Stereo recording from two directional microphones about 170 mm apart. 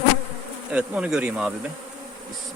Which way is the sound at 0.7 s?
5° right (ahead or behind).